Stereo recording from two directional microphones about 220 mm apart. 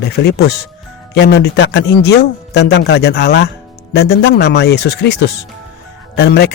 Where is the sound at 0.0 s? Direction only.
45° left (ahead or behind).